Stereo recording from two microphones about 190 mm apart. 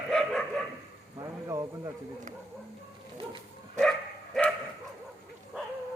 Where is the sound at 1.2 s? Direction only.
20° right (ahead or behind).